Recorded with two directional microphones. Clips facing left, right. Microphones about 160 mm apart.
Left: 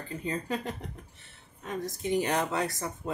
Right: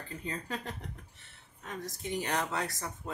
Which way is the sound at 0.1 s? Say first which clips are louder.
Left 6 dB; 15° left (ahead or behind).